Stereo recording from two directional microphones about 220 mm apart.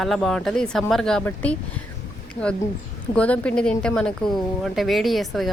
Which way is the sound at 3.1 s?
5° left (ahead or behind).